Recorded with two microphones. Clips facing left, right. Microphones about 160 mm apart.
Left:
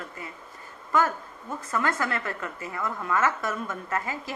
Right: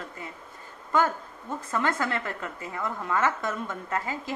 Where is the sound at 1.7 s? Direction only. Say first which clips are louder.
Even; 20° right (ahead or behind).